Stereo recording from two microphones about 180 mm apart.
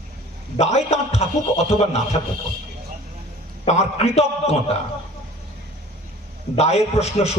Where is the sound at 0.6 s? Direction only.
40° left (ahead or behind).